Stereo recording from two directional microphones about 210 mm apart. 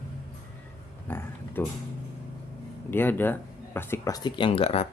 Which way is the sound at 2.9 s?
10° left (ahead or behind).